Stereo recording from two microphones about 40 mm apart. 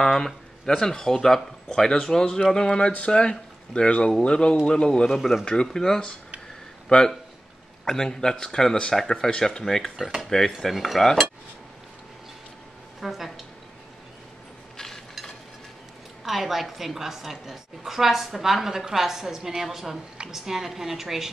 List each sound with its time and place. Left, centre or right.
0.0 s a man's voice: centre
10.7 s cutlery: centre
13.0 s cutlery: centre
16.3 s a woman's voice: centre